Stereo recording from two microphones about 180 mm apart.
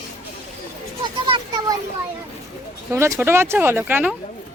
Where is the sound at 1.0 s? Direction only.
25° right (ahead or behind).